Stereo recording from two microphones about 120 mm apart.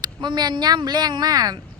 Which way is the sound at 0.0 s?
35° right (ahead or behind).